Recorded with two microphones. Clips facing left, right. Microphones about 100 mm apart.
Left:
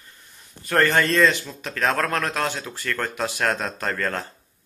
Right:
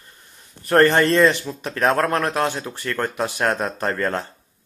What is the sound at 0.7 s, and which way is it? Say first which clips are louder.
A man's voice: right 5 dB; 25° right (ahead or behind).